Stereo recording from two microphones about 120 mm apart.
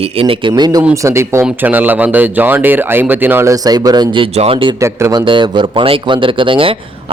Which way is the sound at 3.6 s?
30° right (ahead or behind).